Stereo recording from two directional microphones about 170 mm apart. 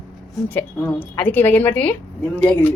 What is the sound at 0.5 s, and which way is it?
A woman's voice, 10° left (ahead or behind).